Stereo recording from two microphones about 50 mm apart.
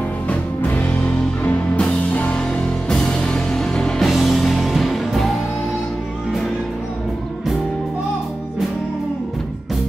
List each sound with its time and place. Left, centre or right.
0.3 s music: left
2.3 s music: centre
4.0 s music: centre